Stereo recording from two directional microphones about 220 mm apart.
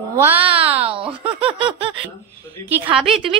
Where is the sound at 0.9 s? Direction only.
25° right (ahead or behind).